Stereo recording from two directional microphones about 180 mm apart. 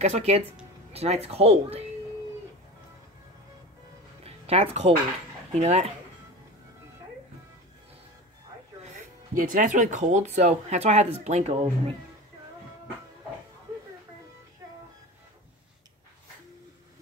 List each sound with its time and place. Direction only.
0.0 s speech: 35° right (ahead or behind)
4.2 s music: 35° right (ahead or behind)
5.5 s speech: 35° right (ahead or behind)
8.8 s speech: 50° right (ahead or behind)